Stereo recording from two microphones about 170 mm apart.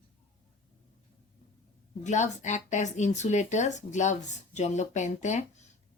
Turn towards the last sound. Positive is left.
turn(degrees=45)  # may be behind; listen again after turning